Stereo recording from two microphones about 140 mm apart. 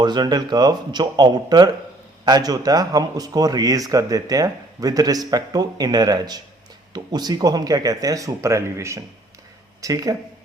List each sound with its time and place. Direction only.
0.0 s a man's voice: 30° right (ahead or behind)